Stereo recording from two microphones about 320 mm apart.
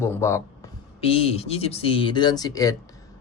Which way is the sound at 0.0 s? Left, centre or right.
Centre.